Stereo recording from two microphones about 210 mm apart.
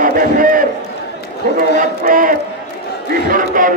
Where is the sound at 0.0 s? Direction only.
40° right (ahead or behind).